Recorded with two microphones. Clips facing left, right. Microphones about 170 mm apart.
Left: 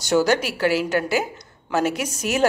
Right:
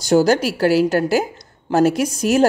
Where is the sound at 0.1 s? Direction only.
35° right (ahead or behind).